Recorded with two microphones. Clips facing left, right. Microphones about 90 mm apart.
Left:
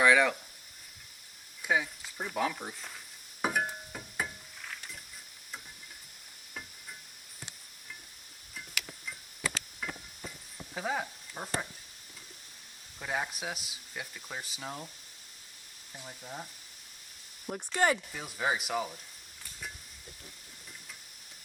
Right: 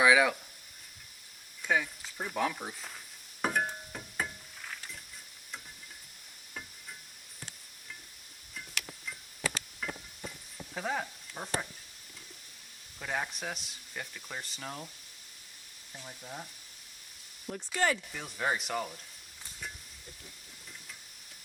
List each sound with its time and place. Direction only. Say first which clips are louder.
0.0 s speech: even; 5° right (ahead or behind)
1.6 s speech: even; 10° left (ahead or behind)
3.4 s music: even; centre (ahead or behind)
9.0 s a sound: right 2 dB; centre (ahead or behind)
13.0 s speech: left 1 dB; 5° left (ahead or behind)
16.0 s speech: left 1 dB; 5° left (ahead or behind)
17.7 s speech: left 2 dB; 20° left (ahead or behind)
18.1 s speech: left 1 dB; 5° left (ahead or behind)